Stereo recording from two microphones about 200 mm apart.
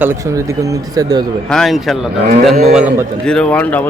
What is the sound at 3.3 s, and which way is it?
Speech, 5° left (ahead or behind).